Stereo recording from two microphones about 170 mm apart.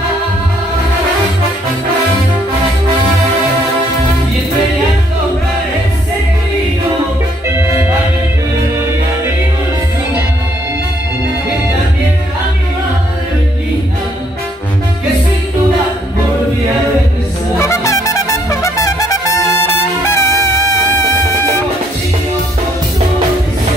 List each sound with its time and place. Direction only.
17.6 s music: 20° left (ahead or behind)